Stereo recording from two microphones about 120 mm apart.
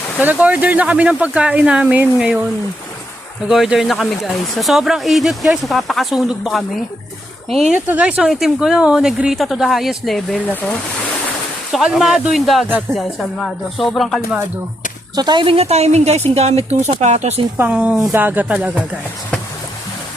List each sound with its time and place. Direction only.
0.2 s speech: 15° right (ahead or behind)
3.5 s speech: centre (ahead or behind)
10.4 s speech: 10° left (ahead or behind)
11.7 s speech: 5° right (ahead or behind)
15.1 s a woman's voice: 35° right (ahead or behind); by 17.4 s 70° right (ahead or behind)
17.6 s speech: 10° right (ahead or behind)